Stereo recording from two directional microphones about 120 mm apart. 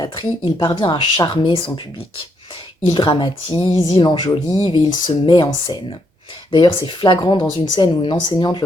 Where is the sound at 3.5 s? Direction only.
25° right (ahead or behind).